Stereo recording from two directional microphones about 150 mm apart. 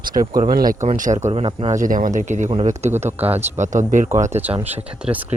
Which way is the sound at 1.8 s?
60° right (ahead or behind).